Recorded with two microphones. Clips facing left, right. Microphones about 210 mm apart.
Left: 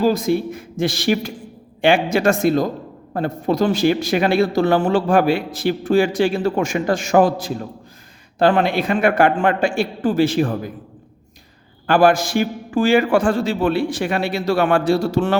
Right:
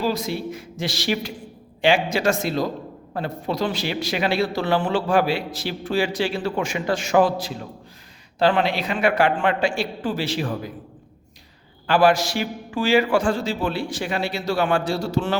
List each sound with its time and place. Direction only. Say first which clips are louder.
0.0 s speech: left 7 dB; 50° left (ahead or behind)
11.9 s a man's voice: left 3 dB; 50° left (ahead or behind)